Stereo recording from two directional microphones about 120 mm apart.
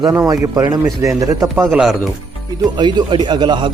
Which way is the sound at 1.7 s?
5° right (ahead or behind).